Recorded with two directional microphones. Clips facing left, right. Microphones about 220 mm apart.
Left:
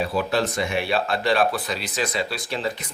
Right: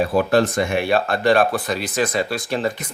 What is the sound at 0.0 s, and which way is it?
Speech, 50° right (ahead or behind).